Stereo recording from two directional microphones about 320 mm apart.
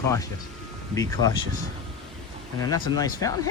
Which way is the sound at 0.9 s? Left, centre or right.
Centre.